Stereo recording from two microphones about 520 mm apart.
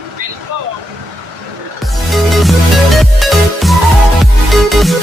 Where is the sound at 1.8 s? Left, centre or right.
Centre.